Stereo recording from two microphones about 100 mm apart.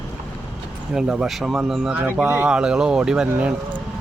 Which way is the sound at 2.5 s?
10° right (ahead or behind).